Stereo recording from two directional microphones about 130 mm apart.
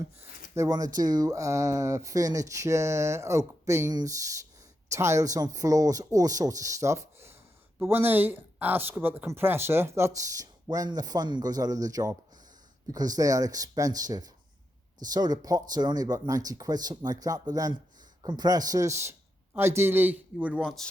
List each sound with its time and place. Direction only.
0.5 s a man's voice: 25° right (ahead or behind)
20.6 s speech: 5° left (ahead or behind)